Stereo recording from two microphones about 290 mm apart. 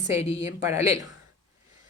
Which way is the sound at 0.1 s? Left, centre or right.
Left.